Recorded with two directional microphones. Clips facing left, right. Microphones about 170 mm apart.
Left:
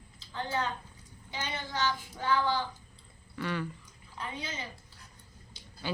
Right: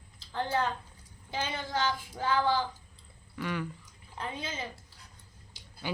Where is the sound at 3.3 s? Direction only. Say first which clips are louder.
Even; 10° right (ahead or behind).